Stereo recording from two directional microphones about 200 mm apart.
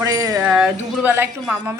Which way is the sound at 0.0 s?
20° right (ahead or behind).